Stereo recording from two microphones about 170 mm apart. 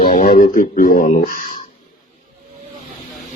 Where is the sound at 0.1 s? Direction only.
60° left (ahead or behind).